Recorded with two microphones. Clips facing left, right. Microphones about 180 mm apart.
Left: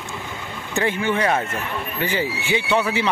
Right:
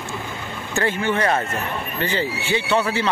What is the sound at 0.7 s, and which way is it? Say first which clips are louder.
Speech: even; 15° left (ahead or behind).